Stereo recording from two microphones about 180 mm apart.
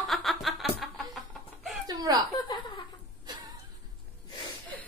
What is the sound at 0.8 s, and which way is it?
Music, centre (ahead or behind).